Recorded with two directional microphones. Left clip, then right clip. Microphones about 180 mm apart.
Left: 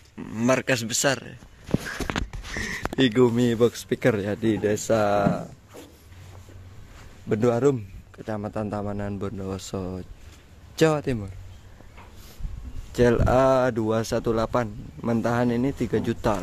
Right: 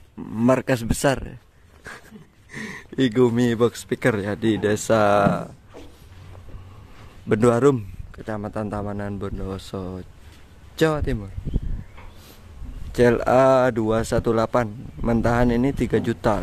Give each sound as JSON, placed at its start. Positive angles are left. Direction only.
{"t": 0.2, "sound": "a sound", "side_deg": -15}
{"t": 0.6, "sound": "speech", "side_deg": -25}
{"t": 2.5, "sound": "speech", "side_deg": -10}
{"t": 7.2, "sound": "speech", "side_deg": -15}
{"t": 8.2, "sound": "a man's voice", "side_deg": 0}
{"t": 12.9, "sound": "speech", "side_deg": -5}